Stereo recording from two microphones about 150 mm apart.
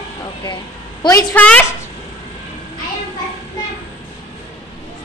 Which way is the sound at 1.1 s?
25° left (ahead or behind).